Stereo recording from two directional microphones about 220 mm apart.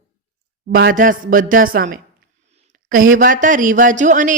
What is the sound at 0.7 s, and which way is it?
Speech, 40° right (ahead or behind).